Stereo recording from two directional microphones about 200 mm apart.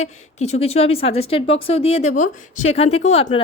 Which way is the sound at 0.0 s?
35° left (ahead or behind).